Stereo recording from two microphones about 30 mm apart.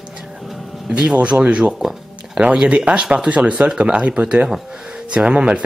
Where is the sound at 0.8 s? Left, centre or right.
Right.